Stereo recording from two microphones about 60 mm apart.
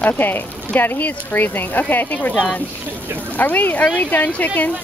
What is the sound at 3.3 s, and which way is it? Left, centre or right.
Speech, left.